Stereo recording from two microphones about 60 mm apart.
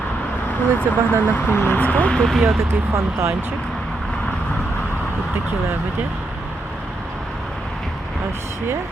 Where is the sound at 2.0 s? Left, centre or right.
Centre.